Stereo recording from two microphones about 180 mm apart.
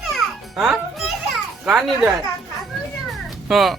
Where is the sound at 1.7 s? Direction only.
5° right (ahead or behind).